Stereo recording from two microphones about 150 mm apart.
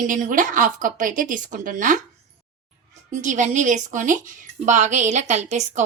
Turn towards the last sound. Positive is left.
turn(degrees=-50)  # may be behind; listen again after turning